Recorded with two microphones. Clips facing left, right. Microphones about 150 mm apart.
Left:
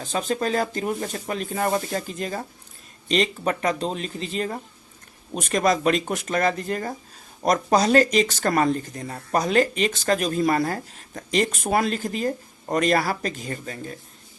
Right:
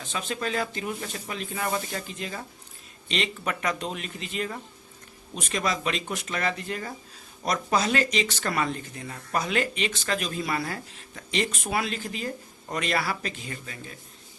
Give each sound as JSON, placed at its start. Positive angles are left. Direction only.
{"t": 0.0, "sound": "speech", "side_deg": 40}